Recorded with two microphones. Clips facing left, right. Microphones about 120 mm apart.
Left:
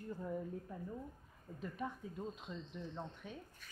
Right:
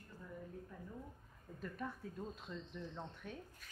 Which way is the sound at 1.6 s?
5° left (ahead or behind).